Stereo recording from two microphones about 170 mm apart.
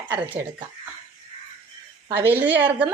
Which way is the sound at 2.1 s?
10° right (ahead or behind).